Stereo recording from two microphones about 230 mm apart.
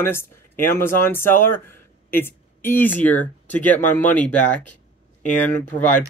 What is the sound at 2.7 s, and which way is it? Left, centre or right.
Speech, centre.